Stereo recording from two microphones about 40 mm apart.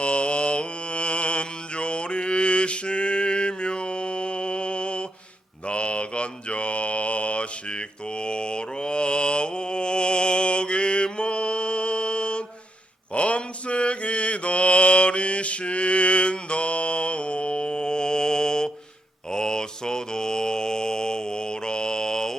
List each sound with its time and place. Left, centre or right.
0.0 s mantra: left